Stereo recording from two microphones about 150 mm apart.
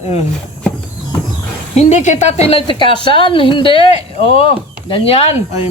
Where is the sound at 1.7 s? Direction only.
50° left (ahead or behind).